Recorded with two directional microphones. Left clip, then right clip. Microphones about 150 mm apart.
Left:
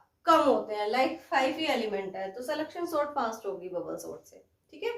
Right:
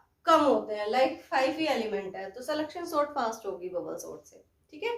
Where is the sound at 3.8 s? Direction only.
30° right (ahead or behind).